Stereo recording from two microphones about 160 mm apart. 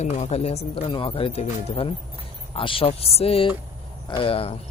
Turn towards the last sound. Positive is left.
turn(degrees=35)  # may be behind; listen again after turning